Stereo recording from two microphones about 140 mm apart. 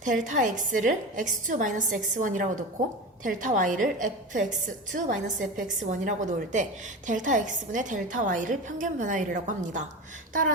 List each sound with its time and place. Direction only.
0.0 s a woman's voice: 65° right (ahead or behind)